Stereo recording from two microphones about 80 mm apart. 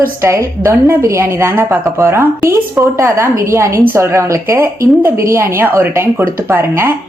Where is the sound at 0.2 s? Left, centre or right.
Right.